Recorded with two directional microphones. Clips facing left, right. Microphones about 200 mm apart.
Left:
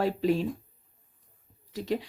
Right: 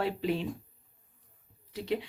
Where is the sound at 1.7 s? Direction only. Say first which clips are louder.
Left 2 dB; 45° left (ahead or behind).